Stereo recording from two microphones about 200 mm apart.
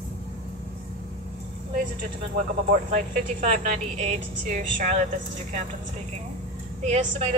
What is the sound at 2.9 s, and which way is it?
A woman's voice, 40° right (ahead or behind).